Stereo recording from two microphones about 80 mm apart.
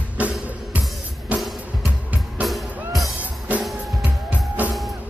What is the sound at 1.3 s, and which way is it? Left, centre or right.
Music, centre.